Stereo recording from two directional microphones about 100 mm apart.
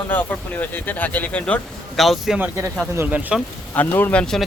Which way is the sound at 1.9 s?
Centre (ahead or behind).